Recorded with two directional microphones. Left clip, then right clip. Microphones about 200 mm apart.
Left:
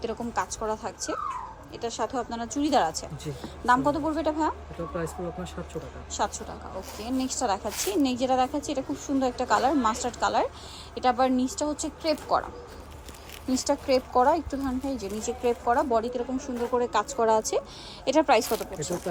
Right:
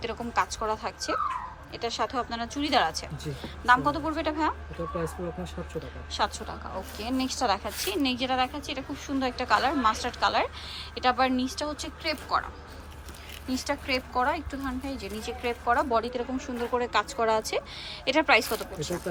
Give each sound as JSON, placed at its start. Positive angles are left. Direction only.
{"t": 0.0, "sound": "a woman's voice", "side_deg": 20}
{"t": 6.1, "sound": "a woman's voice", "side_deg": 20}
{"t": 13.5, "sound": "a woman's voice", "side_deg": 25}